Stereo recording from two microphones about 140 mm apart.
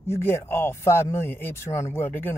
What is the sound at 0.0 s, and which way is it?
A man's voice, 15° left (ahead or behind).